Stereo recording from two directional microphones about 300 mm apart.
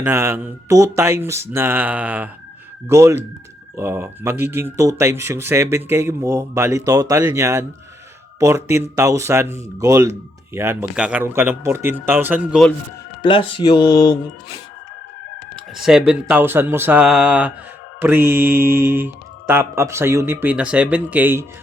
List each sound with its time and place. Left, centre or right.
0.0 s speech: centre
13.2 s speech: centre
15.5 s speech: centre